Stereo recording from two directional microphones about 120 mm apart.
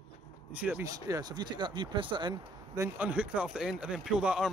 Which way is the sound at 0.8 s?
30° right (ahead or behind).